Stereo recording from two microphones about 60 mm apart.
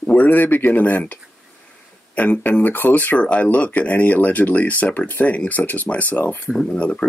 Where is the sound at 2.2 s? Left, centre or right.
Left.